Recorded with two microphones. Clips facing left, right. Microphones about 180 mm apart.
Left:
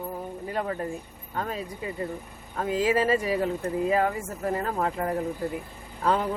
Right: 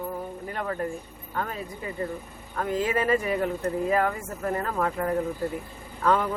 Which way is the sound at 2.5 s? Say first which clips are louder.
Left 2 dB; 30° left (ahead or behind).